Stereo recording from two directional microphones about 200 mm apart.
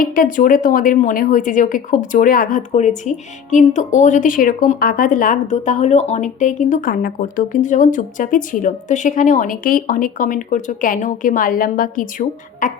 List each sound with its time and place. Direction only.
0.0 s speech: 45° left (ahead or behind)